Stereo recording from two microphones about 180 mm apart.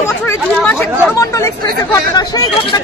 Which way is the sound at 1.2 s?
15° left (ahead or behind).